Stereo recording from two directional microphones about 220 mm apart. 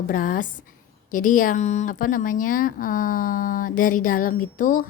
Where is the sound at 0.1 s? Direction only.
40° left (ahead or behind).